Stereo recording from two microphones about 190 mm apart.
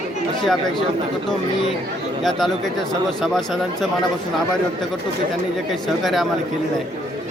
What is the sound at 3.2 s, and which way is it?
Speech, centre (ahead or behind).